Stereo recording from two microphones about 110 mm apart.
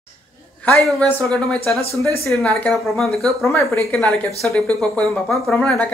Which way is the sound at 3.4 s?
25° left (ahead or behind).